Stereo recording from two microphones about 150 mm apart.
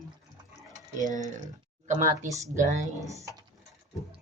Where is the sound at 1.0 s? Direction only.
55° right (ahead or behind).